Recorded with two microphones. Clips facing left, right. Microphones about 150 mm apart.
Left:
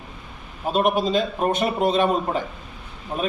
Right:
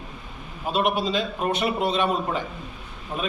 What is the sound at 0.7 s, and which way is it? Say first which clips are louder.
A man's voice: left 3 dB; 45° left (ahead or behind).